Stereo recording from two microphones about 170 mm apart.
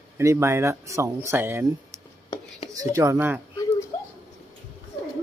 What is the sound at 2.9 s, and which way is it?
Speech, 20° right (ahead or behind).